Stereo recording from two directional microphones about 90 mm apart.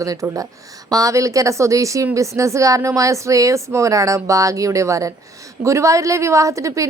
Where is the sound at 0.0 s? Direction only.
40° right (ahead or behind).